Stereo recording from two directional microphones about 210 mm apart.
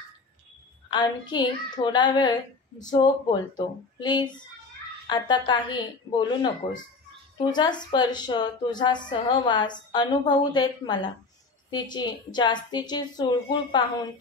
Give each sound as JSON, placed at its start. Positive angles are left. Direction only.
{"t": 0.8, "sound": "a woman's voice", "side_deg": 20}
{"t": 7.5, "sound": "a woman's voice", "side_deg": 20}